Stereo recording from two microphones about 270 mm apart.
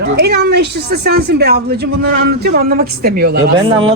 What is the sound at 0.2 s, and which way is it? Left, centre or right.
A woman's voice, right.